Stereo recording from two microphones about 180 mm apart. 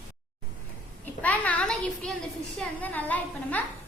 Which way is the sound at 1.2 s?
10° left (ahead or behind).